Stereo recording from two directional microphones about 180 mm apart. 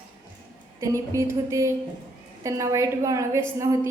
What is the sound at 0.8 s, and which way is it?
A woman's voice, 15° right (ahead or behind).